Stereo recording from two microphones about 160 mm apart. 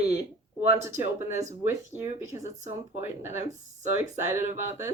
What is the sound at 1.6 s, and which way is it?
Speech, 15° right (ahead or behind).